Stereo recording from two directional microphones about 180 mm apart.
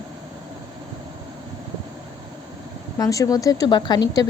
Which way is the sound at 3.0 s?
20° left (ahead or behind).